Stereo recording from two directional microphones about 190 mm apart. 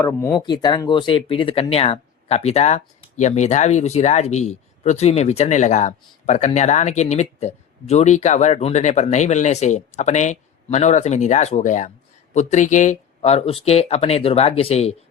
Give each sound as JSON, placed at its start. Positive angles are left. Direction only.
{"t": 0.0, "sound": "speech", "side_deg": 15}